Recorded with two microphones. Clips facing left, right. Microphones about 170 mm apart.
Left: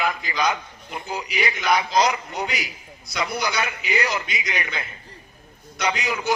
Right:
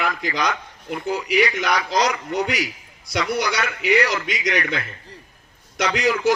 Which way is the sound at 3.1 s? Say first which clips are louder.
Right 3 dB; 80° right.